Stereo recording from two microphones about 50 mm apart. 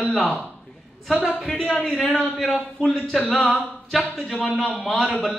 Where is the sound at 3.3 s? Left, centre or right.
Centre.